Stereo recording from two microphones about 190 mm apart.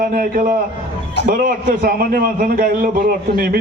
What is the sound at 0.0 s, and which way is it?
A man's voice, 45° right (ahead or behind).